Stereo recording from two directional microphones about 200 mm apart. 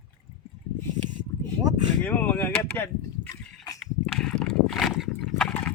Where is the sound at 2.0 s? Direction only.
10° left (ahead or behind).